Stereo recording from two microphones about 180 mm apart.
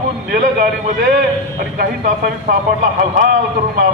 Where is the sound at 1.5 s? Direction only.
55° right (ahead or behind).